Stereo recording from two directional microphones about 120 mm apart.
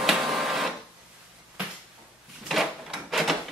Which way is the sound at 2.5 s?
Centre (ahead or behind).